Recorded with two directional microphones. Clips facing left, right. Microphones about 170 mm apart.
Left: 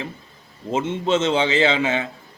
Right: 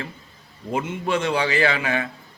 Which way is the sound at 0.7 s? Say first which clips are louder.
Left 3 dB; 25° left (ahead or behind).